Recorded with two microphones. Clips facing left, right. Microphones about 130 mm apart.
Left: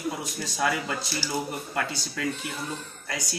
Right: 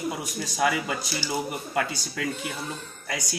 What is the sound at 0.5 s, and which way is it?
Speech, 10° right (ahead or behind).